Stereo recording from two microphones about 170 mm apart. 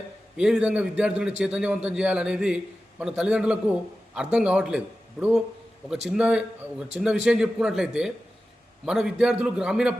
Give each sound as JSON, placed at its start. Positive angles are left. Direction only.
{"t": 0.3, "sound": "a man's voice", "side_deg": -5}
{"t": 6.1, "sound": "a man's voice", "side_deg": -5}